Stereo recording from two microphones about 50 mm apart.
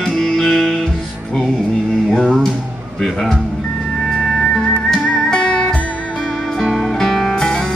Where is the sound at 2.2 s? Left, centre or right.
Centre.